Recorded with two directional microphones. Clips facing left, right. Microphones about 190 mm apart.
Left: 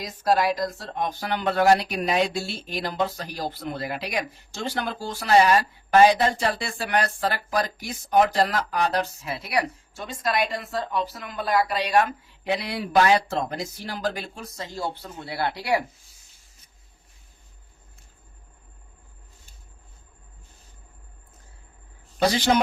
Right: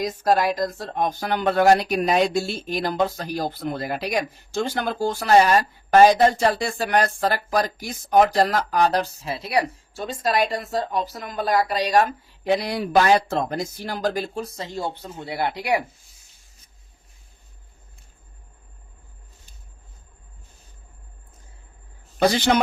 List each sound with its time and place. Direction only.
0.3 s speech: 45° right (ahead or behind); by 15.8 s 15° right (ahead or behind)